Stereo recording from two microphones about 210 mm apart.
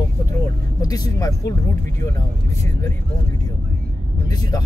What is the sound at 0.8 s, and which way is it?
Speech, 15° left (ahead or behind).